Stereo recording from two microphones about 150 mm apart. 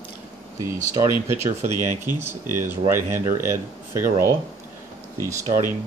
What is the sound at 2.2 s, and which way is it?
Speech, 15° right (ahead or behind).